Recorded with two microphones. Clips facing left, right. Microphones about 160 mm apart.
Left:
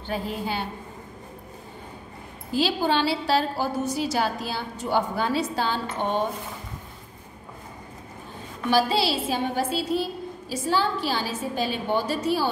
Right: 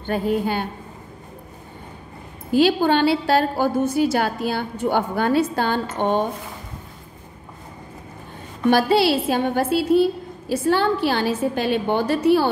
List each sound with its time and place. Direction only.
0.0 s a woman's voice: 50° right (ahead or behind)
2.5 s a woman's voice: 55° right (ahead or behind)
8.6 s a woman's voice: 60° right (ahead or behind)